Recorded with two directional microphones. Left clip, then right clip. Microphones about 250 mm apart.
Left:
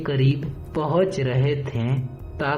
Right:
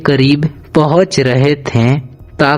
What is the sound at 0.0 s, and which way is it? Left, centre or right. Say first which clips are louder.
A man's voice: right 14 dB; right.